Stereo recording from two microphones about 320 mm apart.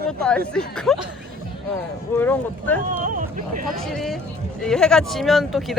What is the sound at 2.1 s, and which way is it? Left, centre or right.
Speech, centre.